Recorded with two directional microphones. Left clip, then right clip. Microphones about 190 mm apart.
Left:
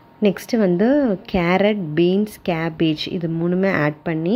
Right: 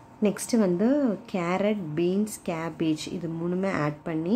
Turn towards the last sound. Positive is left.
turn(degrees=25)  # may be behind; listen again after turning